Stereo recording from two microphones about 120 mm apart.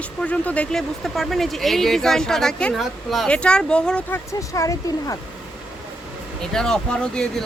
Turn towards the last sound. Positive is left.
turn(degrees=5)  # may be behind; listen again after turning